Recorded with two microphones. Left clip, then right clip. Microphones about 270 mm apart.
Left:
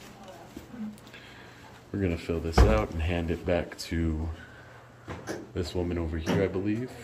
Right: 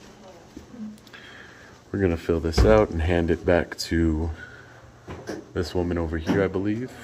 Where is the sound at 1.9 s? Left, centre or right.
Centre.